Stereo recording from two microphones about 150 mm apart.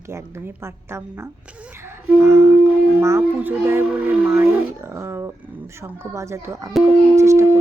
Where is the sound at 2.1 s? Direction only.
15° right (ahead or behind).